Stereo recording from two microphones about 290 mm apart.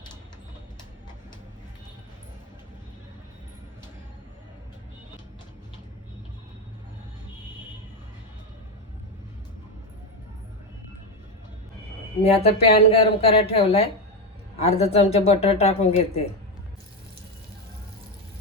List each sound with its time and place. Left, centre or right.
12.2 s speech: left